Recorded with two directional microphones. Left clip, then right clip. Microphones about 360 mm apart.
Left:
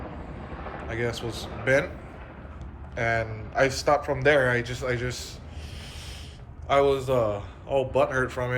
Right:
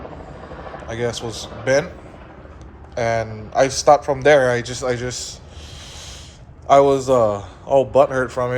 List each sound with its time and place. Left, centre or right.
0.9 s speech: centre
2.9 s speech: centre
6.7 s speech: centre